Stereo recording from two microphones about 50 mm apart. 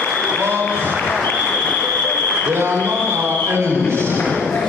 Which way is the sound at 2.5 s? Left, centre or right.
Right.